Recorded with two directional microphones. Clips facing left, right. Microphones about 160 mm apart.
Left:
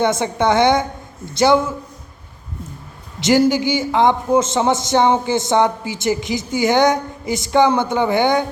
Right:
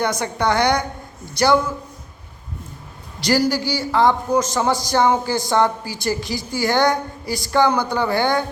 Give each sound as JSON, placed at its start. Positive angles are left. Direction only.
{"t": 0.0, "sound": "a man's voice", "side_deg": 25}
{"t": 3.2, "sound": "a man's voice", "side_deg": 20}